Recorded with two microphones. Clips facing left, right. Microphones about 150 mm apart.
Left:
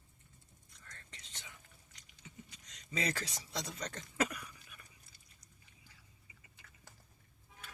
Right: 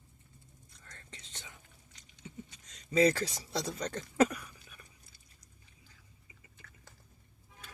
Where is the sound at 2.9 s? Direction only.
30° right (ahead or behind).